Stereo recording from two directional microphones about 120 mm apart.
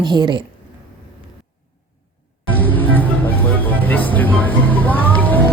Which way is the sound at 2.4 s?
15° left (ahead or behind).